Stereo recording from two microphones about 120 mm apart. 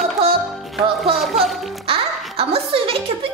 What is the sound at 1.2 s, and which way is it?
Speech, centre (ahead or behind).